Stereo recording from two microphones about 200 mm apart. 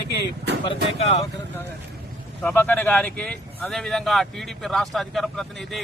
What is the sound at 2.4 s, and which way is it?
Speech, 10° left (ahead or behind).